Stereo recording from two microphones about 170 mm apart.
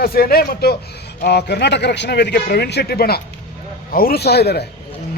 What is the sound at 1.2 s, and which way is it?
A man's voice, 80° left.